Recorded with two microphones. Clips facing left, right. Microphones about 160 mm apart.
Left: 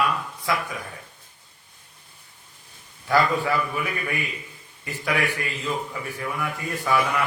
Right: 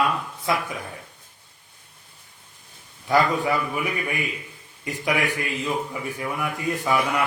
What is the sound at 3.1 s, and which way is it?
Speech, 20° right (ahead or behind).